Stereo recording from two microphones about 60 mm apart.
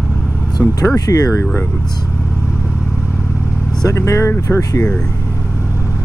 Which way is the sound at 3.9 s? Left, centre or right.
Left.